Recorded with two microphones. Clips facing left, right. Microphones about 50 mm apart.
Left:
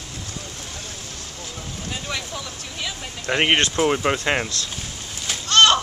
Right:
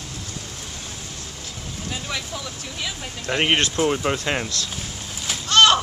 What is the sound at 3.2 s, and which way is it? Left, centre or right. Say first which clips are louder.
Speech: left 1 dB; centre.